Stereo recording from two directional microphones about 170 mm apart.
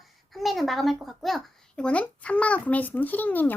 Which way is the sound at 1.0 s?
Centre (ahead or behind).